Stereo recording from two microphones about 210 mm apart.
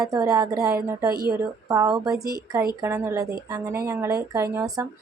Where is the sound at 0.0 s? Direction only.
15° right (ahead or behind).